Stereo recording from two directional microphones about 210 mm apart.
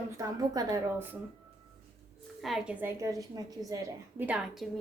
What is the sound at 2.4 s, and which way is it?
A woman's voice, centre (ahead or behind).